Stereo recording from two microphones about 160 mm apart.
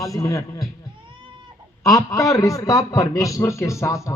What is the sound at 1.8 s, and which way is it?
A man's voice, 20° left (ahead or behind).